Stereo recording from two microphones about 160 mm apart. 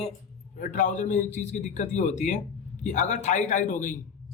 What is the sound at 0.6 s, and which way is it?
A man's voice, 50° left (ahead or behind).